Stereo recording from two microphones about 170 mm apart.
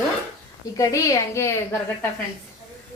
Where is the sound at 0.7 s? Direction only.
20° left (ahead or behind).